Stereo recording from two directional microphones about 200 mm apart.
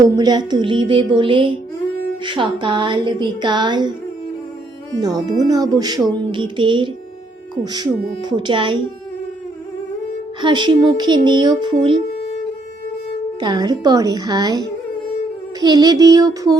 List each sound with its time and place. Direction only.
0.0 s speech: 20° right (ahead or behind)
4.9 s speech: 20° right (ahead or behind)
10.4 s speech: 25° right (ahead or behind)
13.4 s speech: 20° right (ahead or behind)
15.6 s speech: 20° right (ahead or behind)